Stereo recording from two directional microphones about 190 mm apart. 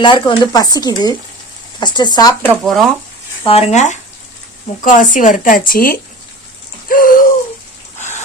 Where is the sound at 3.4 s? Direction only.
30° left (ahead or behind); by 7.3 s 45° left (ahead or behind).